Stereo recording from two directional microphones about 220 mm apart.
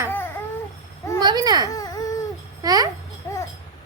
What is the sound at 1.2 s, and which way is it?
Speech, 20° right (ahead or behind).